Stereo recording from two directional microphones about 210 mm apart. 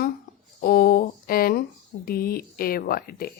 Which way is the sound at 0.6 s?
45° left (ahead or behind).